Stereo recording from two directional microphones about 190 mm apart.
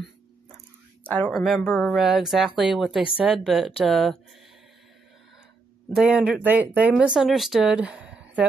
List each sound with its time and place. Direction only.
1.2 s a woman's voice: centre (ahead or behind)
5.9 s a woman's voice: 5° right (ahead or behind)